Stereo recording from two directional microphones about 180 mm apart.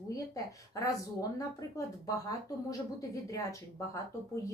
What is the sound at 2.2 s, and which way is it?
Speech, 20° left (ahead or behind).